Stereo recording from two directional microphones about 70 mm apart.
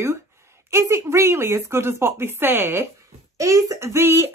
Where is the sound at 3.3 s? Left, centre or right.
Right.